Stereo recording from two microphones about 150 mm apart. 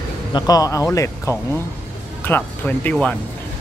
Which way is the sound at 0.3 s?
25° left (ahead or behind).